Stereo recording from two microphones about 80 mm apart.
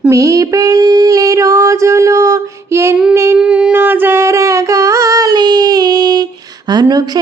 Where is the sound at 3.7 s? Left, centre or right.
Right.